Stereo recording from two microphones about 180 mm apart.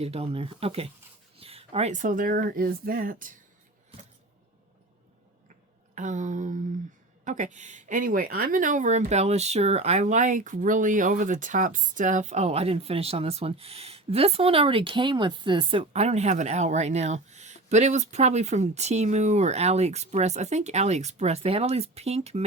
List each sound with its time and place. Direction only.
0.0 s speech: 35° right (ahead or behind); by 3.3 s 50° right (ahead or behind)
5.9 s speech: 45° right (ahead or behind)